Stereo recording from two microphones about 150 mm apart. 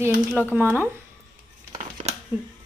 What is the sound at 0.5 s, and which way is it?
Speech, 15° right (ahead or behind).